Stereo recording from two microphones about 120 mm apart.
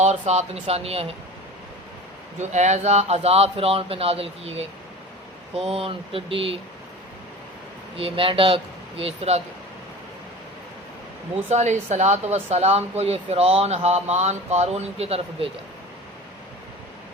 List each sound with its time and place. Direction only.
0.0 s speech: 70° right (ahead or behind)
2.4 s speech: 75° right (ahead or behind); by 6.6 s 50° right (ahead or behind)
7.9 s speech: 50° right (ahead or behind)
11.4 s speech: 70° right (ahead or behind); by 15.5 s 55° right (ahead or behind)